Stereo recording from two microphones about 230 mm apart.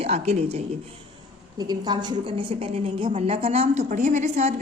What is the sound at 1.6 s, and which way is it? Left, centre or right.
A woman's voice, centre.